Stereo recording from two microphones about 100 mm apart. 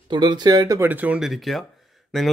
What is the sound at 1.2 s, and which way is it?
Speech, centre (ahead or behind).